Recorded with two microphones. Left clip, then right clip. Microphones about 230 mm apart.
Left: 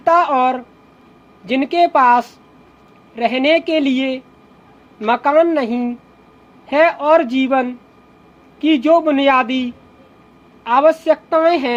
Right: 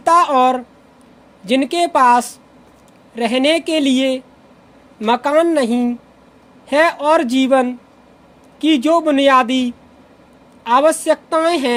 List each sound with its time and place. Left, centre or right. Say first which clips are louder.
0.0 s a woman's voice: right 1 dB; right